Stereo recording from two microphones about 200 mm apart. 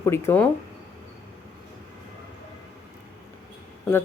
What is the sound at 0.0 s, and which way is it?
Speech, 10° left (ahead or behind).